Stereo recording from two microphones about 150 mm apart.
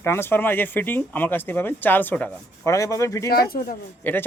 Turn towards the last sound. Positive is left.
turn(degrees=10)  # may be behind; listen again after turning